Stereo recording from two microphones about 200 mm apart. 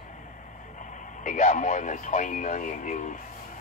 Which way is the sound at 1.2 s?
40° left (ahead or behind).